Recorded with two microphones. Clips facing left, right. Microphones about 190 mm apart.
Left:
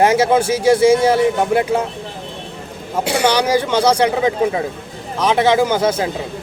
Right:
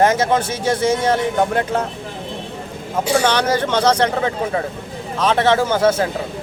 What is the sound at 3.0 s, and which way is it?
Speech, 65° left (ahead or behind).